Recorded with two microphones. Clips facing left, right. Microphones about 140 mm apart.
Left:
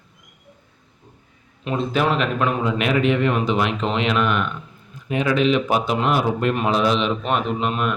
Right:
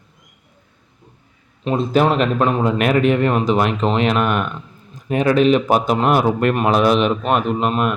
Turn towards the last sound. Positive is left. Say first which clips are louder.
# right 4 dB
turn(degrees=-45)  # may be behind; listen again after turning